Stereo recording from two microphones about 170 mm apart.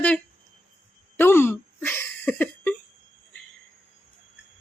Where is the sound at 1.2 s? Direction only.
15° left (ahead or behind).